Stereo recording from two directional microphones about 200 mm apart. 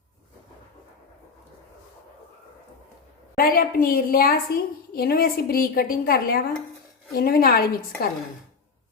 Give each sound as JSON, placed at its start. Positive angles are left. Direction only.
{"t": 3.3, "sound": "a woman's voice", "side_deg": 45}